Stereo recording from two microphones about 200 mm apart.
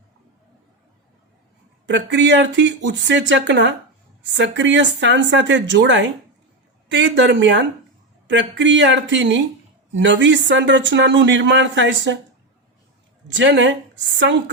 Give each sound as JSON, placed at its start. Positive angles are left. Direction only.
{"t": 1.9, "sound": "speech", "side_deg": -60}
{"t": 13.2, "sound": "speech", "side_deg": -65}